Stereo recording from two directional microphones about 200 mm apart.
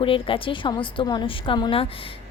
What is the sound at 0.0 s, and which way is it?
A woman's voice, 25° left (ahead or behind).